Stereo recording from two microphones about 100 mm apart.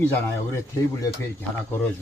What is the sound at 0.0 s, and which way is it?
Speech, 20° left (ahead or behind).